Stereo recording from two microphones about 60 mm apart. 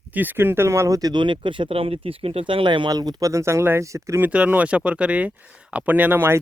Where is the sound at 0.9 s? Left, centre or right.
Right.